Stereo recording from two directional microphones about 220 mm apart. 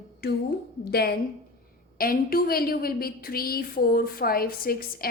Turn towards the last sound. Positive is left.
turn(degrees=40)  # may be behind; listen again after turning